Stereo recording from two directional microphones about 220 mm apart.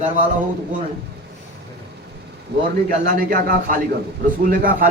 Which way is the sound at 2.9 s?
40° right (ahead or behind).